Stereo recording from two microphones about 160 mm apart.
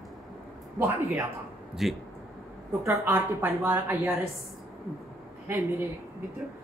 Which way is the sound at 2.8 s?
15° right (ahead or behind).